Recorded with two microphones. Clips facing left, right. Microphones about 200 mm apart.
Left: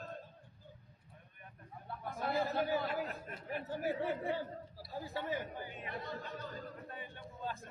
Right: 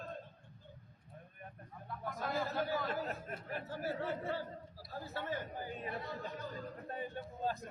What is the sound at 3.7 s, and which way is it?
A man's voice, 15° left (ahead or behind).